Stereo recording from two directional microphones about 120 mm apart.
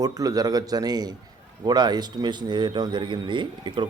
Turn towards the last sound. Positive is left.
turn(degrees=-40)  # may be behind; listen again after turning